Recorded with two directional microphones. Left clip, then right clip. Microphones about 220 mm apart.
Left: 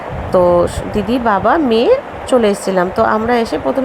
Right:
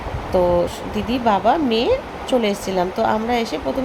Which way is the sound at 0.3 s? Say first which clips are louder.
Left 6 dB; 15° left (ahead or behind).